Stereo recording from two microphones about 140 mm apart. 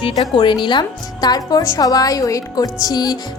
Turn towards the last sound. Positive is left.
turn(degrees=30)  # may be behind; listen again after turning